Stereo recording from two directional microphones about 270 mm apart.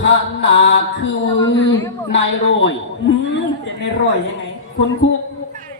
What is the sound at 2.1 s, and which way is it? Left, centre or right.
Speech, left.